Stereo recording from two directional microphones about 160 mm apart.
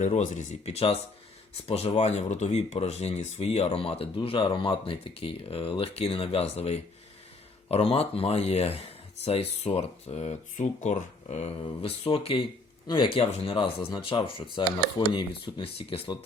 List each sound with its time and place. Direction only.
0.0 s speech: 50° left (ahead or behind)